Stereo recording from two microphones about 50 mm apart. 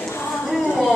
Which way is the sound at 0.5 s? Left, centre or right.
Centre.